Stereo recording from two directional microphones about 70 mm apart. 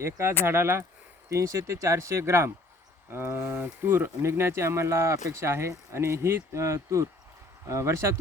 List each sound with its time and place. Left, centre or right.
0.0 s speech: right
1.3 s speech: right